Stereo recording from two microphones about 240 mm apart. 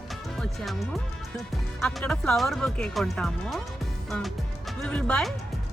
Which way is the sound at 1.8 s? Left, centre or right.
Centre.